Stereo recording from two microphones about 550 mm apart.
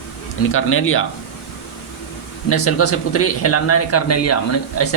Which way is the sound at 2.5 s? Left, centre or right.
Left.